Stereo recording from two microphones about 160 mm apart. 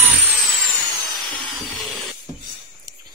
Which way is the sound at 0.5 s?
Centre (ahead or behind).